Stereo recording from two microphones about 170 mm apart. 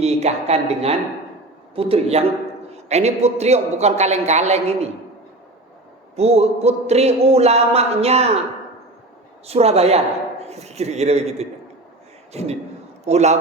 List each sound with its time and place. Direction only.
0.0 s a man's voice: 40° right (ahead or behind)
6.1 s a man's voice: 40° right (ahead or behind)
9.5 s a man's voice: 40° right (ahead or behind)